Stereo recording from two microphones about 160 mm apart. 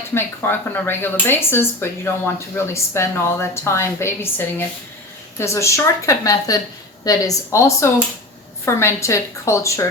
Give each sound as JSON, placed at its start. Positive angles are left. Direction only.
{"t": 0.1, "sound": "a woman's voice", "side_deg": 15}